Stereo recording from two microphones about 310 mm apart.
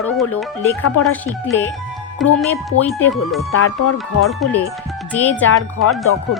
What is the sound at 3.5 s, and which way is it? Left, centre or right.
Music, left.